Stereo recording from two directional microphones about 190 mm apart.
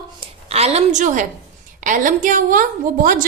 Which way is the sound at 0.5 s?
35° right (ahead or behind).